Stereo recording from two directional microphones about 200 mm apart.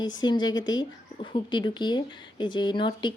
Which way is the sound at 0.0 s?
20° left (ahead or behind).